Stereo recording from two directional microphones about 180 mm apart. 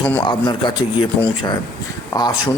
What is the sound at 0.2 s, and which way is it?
Speech, 25° left (ahead or behind).